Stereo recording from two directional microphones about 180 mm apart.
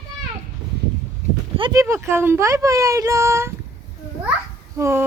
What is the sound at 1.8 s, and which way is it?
Speech, 15° right (ahead or behind).